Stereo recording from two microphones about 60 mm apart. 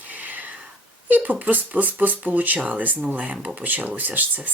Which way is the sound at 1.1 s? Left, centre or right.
Right.